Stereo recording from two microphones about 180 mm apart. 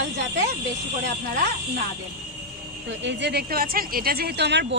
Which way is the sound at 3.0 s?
75° right (ahead or behind).